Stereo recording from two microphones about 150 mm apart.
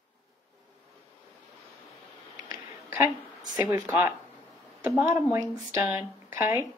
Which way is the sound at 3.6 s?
15° right (ahead or behind).